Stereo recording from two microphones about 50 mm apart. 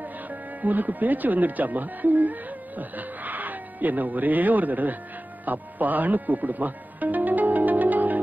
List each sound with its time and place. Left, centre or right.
0.0 s speech: right
5.4 s music: right